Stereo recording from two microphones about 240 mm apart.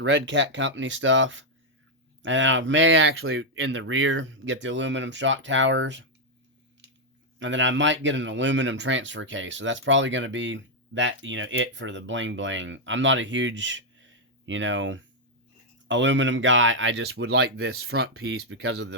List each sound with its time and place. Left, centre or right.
0.0 s speech: right
7.3 s speech: right